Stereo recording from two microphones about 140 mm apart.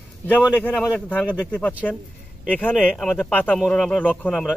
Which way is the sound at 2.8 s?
10° left (ahead or behind).